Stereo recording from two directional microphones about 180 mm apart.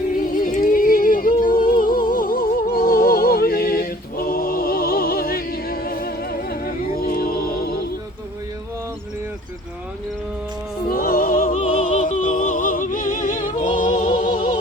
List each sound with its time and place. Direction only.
0.1 s music: 50° left (ahead or behind)
10.8 s opera: 55° left (ahead or behind)
13.7 s music: 45° left (ahead or behind)